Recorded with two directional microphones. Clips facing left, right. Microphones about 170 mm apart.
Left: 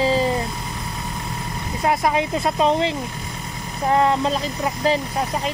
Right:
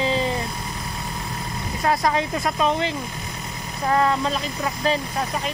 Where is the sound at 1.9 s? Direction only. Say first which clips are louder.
Left 1 dB; 15° left (ahead or behind).